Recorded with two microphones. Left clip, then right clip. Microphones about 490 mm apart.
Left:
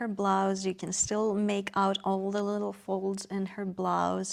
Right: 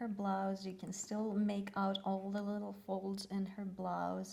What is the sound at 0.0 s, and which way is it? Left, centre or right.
Speech, left.